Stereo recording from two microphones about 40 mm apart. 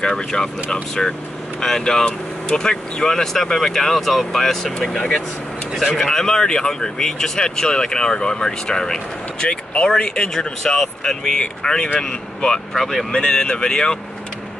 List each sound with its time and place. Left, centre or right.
0.0 s speech: centre
1.6 s speech: centre
5.9 s speech: centre
12.7 s speech: centre
13.1 s speech: centre